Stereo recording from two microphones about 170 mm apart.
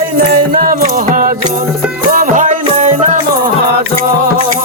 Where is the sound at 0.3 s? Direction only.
55° right (ahead or behind).